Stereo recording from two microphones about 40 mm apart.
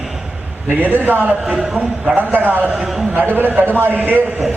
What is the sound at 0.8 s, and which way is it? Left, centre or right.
Speech, right.